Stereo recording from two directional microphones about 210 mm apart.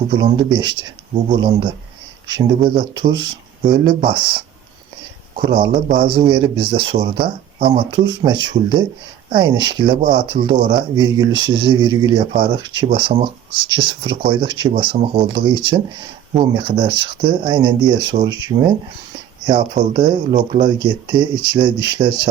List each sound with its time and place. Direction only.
0.1 s speech: 20° right (ahead or behind)
20.3 s speech: 35° right (ahead or behind)
20.7 s speech: 20° right (ahead or behind)